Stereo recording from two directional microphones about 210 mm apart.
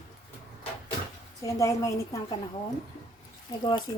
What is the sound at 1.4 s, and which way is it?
Speech, 15° left (ahead or behind).